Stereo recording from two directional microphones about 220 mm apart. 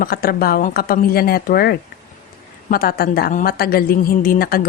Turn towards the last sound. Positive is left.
turn(degrees=40)  # may be behind; listen again after turning